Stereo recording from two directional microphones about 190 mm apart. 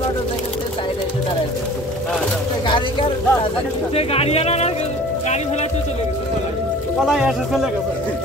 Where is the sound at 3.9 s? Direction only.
30° left (ahead or behind).